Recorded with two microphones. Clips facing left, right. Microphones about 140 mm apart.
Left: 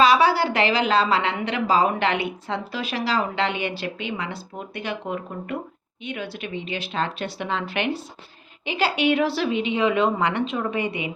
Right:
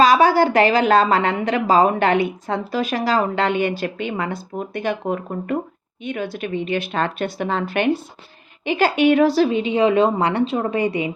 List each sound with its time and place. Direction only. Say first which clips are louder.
0.0 s a woman's voice: right 4 dB; 45° right (ahead or behind)